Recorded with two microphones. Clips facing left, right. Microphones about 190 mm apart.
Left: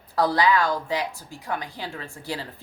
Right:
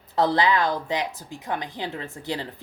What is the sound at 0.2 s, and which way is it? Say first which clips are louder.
Speech: even; 20° right (ahead or behind).